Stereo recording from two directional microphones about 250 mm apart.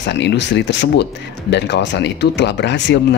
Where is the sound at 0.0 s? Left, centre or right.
Left.